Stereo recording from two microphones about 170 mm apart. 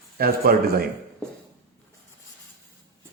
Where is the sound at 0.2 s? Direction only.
60° right (ahead or behind).